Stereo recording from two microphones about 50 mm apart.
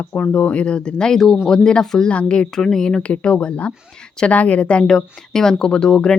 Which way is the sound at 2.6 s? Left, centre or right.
Centre.